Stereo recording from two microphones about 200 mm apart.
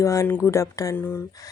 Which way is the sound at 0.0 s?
15° left (ahead or behind).